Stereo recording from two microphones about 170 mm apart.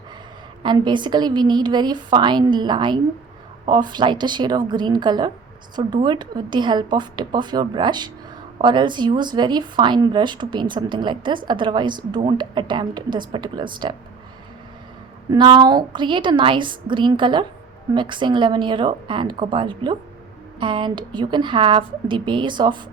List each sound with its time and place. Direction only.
0.6 s speech: 25° right (ahead or behind)
15.3 s speech: 25° right (ahead or behind)